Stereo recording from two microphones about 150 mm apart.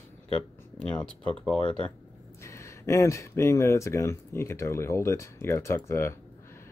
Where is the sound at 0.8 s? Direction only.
5° left (ahead or behind).